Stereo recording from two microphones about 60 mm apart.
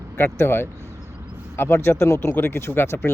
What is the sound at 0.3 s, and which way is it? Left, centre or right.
Speech, left.